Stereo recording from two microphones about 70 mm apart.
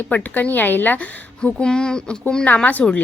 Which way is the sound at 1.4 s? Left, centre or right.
Centre.